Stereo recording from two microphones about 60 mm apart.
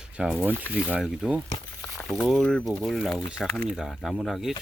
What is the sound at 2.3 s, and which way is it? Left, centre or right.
Speech, centre.